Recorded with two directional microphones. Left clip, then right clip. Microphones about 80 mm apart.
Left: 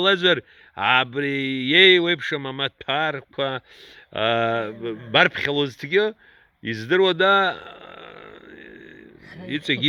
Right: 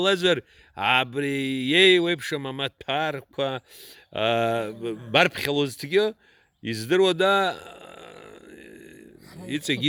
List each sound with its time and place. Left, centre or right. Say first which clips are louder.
0.0 s speech: left 3 dB; right
3.3 s speech: left 2 dB; right
5.1 s speech: left 3 dB; right
6.6 s a sound: left 2 dB; right
9.5 s speech: left 3 dB; right